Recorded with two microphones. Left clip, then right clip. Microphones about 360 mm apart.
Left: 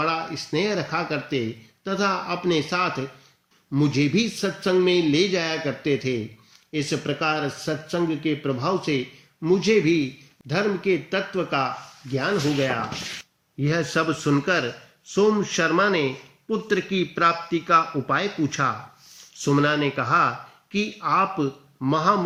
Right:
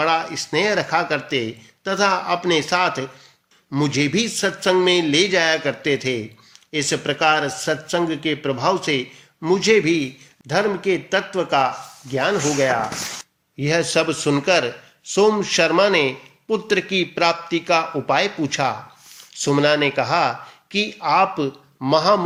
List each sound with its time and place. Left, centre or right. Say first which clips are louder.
0.0 s speech: right 5 dB; centre
13.6 s a man's voice: right 5 dB; centre